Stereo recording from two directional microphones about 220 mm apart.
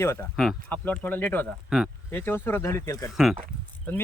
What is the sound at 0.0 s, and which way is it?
Speech, 10° left (ahead or behind).